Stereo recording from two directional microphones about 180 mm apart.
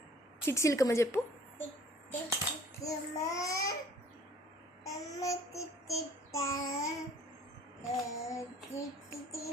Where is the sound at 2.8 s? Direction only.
20° left (ahead or behind).